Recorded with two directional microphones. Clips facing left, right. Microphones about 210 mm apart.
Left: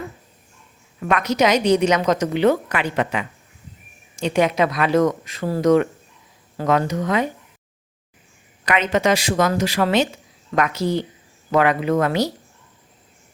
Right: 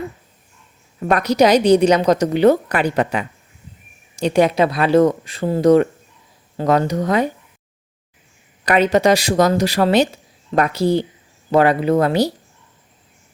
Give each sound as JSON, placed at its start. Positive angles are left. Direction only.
{"t": 0.9, "sound": "a woman's voice", "side_deg": -35}
{"t": 8.6, "sound": "a woman's voice", "side_deg": -35}